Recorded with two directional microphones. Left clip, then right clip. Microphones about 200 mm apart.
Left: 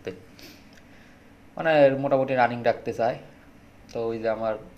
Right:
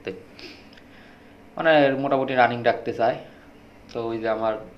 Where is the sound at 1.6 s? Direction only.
50° left (ahead or behind).